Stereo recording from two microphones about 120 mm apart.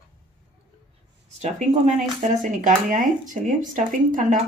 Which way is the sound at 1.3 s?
75° right (ahead or behind).